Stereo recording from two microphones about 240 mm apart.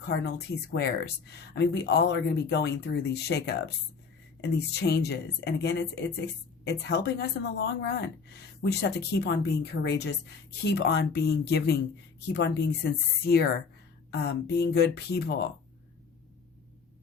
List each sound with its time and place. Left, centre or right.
0.0 s speech: left